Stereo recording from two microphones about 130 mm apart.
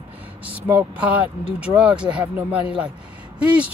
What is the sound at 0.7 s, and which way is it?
Speech, 10° right (ahead or behind).